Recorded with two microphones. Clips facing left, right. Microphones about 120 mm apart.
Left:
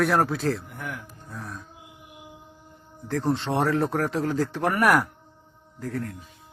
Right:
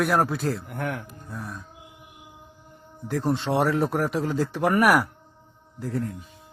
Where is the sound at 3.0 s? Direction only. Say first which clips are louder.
Even; 15° right (ahead or behind).